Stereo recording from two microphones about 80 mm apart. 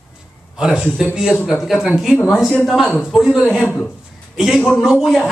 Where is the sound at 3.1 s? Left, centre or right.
Centre.